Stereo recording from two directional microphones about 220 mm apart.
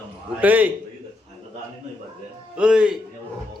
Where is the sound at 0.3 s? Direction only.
5° right (ahead or behind).